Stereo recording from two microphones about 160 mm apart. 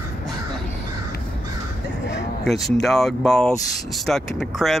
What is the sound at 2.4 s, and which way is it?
Speech, centre (ahead or behind).